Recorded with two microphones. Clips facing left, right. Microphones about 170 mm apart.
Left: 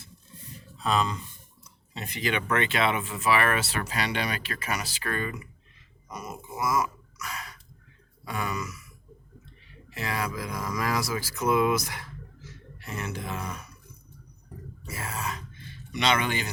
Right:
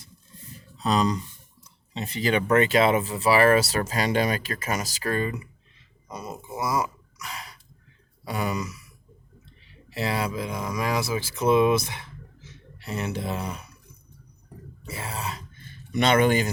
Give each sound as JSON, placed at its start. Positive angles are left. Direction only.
{"t": 0.8, "sound": "speech", "side_deg": -35}
{"t": 6.1, "sound": "a sound", "side_deg": -30}
{"t": 8.2, "sound": "speech", "side_deg": -30}
{"t": 14.8, "sound": "grunt", "side_deg": -30}
{"t": 15.6, "sound": "speech", "side_deg": -50}